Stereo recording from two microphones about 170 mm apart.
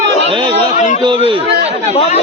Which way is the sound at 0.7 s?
45° left (ahead or behind).